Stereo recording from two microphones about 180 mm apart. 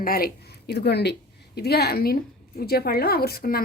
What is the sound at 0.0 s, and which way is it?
Speech, 55° left (ahead or behind).